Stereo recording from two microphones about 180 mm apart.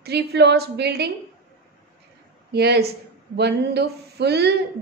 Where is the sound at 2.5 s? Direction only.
65° right (ahead or behind).